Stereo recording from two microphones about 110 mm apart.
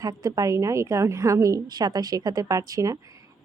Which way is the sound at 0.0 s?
35° right (ahead or behind).